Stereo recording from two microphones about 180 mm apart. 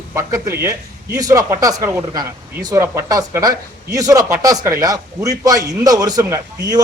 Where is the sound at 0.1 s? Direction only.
15° right (ahead or behind).